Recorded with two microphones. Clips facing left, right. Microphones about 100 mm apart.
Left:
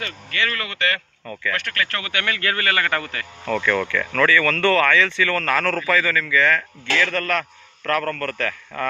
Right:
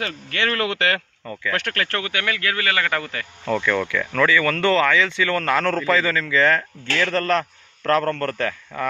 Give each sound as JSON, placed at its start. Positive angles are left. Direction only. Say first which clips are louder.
{"t": 0.0, "sound": "speech", "louder": "right 2 dB", "side_deg": -65}
{"t": 1.5, "sound": "speech", "louder": "right 3 dB", "side_deg": -65}
{"t": 1.9, "sound": "speech", "louder": "right 3 dB", "side_deg": -30}
{"t": 2.1, "sound": "a man's voice", "louder": "left 2 dB", "side_deg": -10}